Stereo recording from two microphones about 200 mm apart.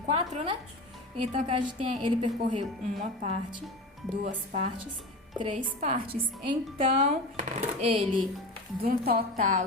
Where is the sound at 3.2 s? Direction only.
30° right (ahead or behind).